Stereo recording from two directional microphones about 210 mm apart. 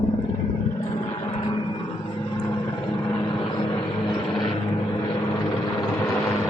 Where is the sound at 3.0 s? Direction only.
20° left (ahead or behind).